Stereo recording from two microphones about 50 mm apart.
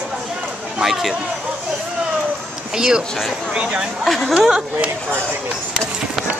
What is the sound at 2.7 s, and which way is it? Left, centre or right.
Speech, centre.